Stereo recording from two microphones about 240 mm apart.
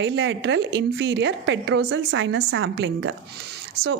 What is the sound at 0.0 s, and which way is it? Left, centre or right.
A woman's voice, right.